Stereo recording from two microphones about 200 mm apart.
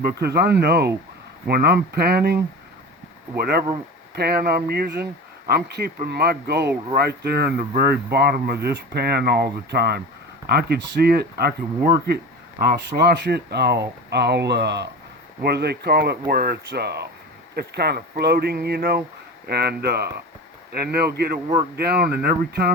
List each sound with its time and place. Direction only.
0.2 s speech: 55° right (ahead or behind)